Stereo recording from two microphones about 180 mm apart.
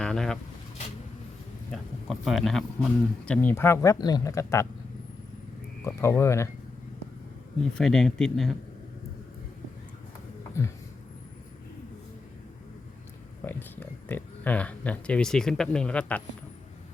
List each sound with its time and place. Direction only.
0.0 s a sound: 5° left (ahead or behind)
1.7 s speech: centre (ahead or behind); by 4.7 s 15° left (ahead or behind)
5.8 s speech: 15° left (ahead or behind)
7.7 s speech: 5° left (ahead or behind)
10.6 s speech: 15° left (ahead or behind)
13.4 s speech: 10° left (ahead or behind)